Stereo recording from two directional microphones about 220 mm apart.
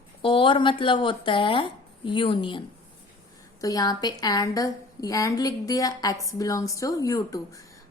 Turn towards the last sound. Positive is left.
turn(degrees=15)  # may be behind; listen again after turning